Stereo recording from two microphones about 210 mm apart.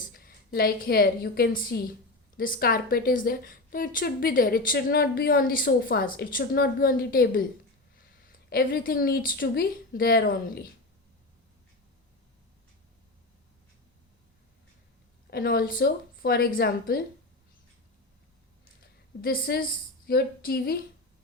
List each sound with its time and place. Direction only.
0.1 s a woman's voice: 45° left (ahead or behind)
15.3 s a woman's voice: 45° left (ahead or behind)
18.8 s a sound: 45° left (ahead or behind)
20.1 s a woman's voice: 45° left (ahead or behind)